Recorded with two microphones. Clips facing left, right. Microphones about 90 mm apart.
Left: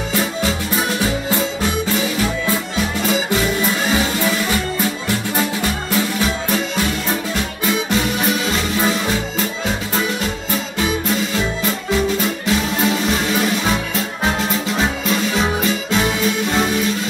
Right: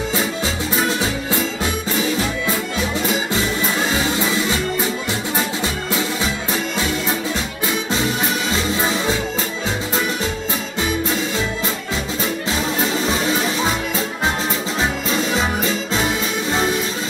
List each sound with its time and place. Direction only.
0.8 s music: 25° right (ahead or behind)
4.2 s music: 25° right (ahead or behind)
7.9 s music: 25° right (ahead or behind)
15.1 s music: 30° right (ahead or behind)